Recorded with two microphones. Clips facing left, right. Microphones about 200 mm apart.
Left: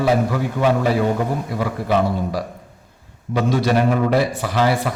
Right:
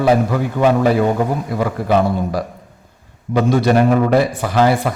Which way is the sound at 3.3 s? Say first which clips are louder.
Right 4 dB; 50° right (ahead or behind).